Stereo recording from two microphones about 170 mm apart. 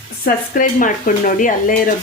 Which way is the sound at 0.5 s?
55° left (ahead or behind).